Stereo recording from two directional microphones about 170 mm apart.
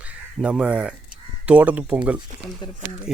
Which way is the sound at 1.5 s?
10° right (ahead or behind).